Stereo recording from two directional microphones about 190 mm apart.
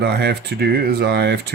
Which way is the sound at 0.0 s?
60° right (ahead or behind).